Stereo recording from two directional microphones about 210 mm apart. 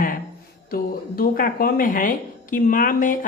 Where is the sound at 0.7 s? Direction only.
45° left (ahead or behind).